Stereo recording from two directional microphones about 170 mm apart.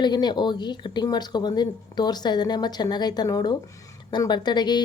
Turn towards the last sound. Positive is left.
turn(degrees=25)  # may be behind; listen again after turning